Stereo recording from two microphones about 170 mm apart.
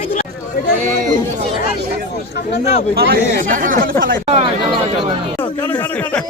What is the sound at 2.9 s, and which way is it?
Speech, 65° right (ahead or behind).